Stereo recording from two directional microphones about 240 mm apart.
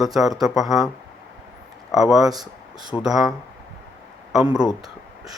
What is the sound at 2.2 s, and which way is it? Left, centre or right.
Speech, centre.